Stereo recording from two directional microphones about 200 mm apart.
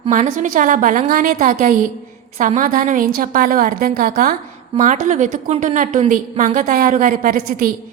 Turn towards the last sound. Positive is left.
turn(degrees=-45)  # may be behind; listen again after turning